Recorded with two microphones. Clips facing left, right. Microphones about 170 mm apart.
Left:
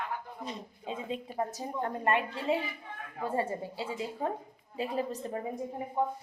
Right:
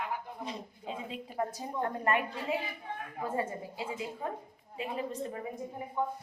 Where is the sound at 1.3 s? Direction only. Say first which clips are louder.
Right 2 dB; 25° left (ahead or behind).